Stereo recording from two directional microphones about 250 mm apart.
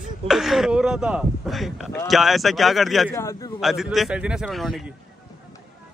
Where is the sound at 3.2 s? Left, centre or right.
Centre.